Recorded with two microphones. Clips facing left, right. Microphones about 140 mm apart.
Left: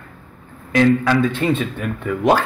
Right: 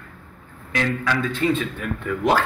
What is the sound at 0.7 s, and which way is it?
Speech, 40° left (ahead or behind).